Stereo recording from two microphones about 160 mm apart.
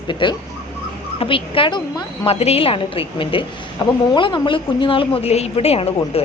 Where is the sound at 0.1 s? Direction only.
30° left (ahead or behind).